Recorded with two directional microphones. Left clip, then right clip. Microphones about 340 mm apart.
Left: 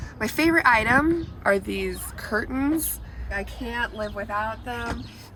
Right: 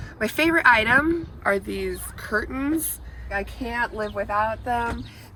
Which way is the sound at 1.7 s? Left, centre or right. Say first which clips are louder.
Even; left.